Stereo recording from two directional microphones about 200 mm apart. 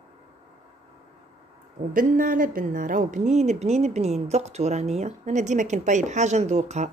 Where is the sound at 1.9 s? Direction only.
45° right (ahead or behind).